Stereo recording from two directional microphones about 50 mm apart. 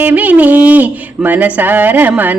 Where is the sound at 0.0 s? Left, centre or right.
Right.